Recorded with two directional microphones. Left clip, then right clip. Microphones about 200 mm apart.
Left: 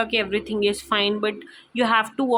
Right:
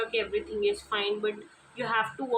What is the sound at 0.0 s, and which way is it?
Speech, 50° left (ahead or behind).